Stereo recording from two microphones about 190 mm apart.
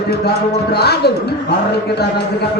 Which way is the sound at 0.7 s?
55° left (ahead or behind).